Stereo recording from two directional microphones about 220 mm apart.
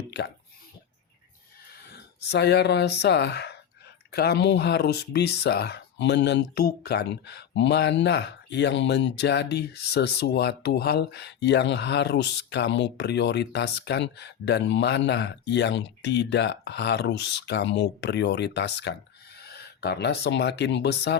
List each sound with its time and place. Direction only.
1.7 s speech: 50° left (ahead or behind)